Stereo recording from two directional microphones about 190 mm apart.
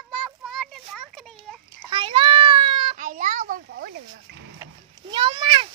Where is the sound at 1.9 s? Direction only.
25° right (ahead or behind).